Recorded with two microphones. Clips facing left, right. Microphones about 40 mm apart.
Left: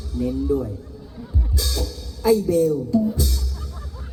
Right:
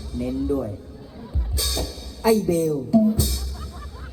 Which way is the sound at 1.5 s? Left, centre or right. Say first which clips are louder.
Even; right.